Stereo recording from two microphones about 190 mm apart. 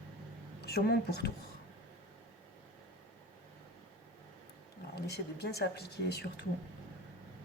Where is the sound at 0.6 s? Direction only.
60° left (ahead or behind).